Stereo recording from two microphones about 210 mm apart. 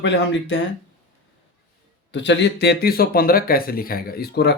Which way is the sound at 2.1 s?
55° left (ahead or behind).